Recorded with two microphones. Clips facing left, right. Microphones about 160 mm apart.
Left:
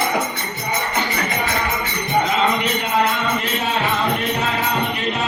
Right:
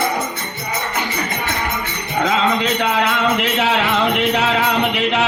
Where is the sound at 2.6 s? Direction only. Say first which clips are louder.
Right 2 dB; 90° right.